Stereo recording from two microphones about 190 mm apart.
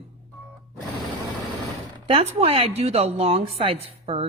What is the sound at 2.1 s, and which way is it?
A woman's voice, 30° right (ahead or behind).